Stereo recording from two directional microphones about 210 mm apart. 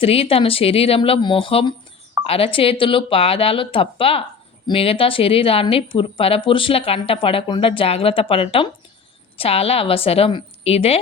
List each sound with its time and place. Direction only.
0.0 s a woman's voice: 25° left (ahead or behind)